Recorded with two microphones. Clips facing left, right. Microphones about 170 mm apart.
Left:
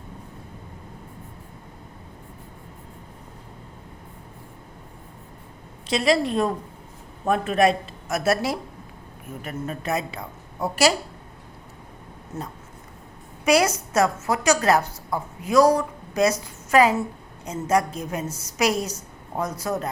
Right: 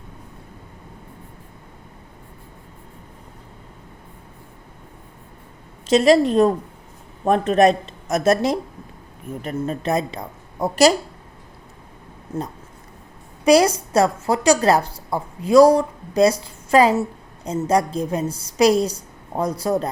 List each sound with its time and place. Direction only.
5.9 s a woman's voice: 40° right (ahead or behind)
9.4 s a woman's voice: 35° right (ahead or behind)
13.4 s a woman's voice: 35° right (ahead or behind)